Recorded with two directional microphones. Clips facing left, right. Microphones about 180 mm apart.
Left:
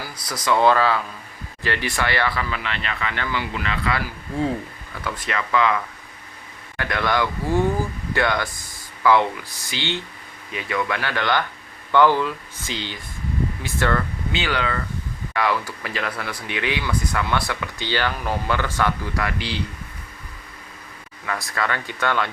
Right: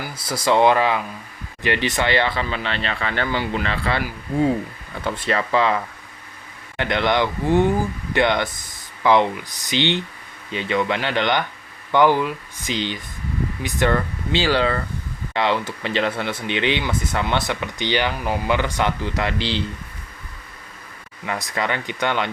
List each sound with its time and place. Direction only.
0.0 s speech: 30° right (ahead or behind)
5.0 s speech: 30° right (ahead or behind)
14.3 s speech: 30° right (ahead or behind)
21.2 s speech: 20° right (ahead or behind)